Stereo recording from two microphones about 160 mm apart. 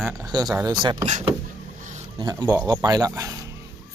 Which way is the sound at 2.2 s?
25° right (ahead or behind).